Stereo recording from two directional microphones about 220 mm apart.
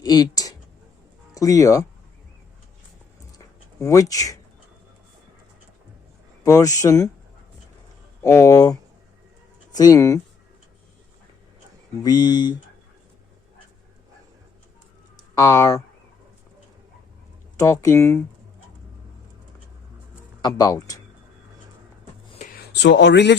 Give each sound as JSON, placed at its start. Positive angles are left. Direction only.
{"t": 0.0, "sound": "a sound", "side_deg": 20}
{"t": 1.3, "sound": "speech", "side_deg": 15}
{"t": 3.3, "sound": "a sound", "side_deg": 15}
{"t": 6.4, "sound": "speech", "side_deg": 15}
{"t": 8.2, "sound": "speech", "side_deg": 15}
{"t": 12.0, "sound": "speech", "side_deg": 20}
{"t": 15.1, "sound": "a sound", "side_deg": 15}
{"t": 17.6, "sound": "speech", "side_deg": 15}
{"t": 20.4, "sound": "speech", "side_deg": 15}
{"t": 22.7, "sound": "speech", "side_deg": 50}